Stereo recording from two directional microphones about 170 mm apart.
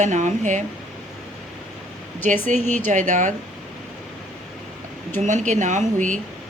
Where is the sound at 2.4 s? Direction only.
45° right (ahead or behind).